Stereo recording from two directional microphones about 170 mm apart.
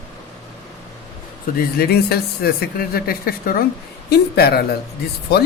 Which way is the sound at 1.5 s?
65° left (ahead or behind).